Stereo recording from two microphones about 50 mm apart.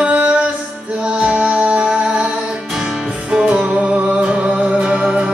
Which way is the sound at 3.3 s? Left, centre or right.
Centre.